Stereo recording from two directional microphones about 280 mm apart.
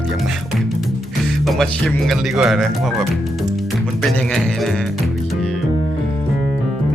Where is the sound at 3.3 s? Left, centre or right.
Centre.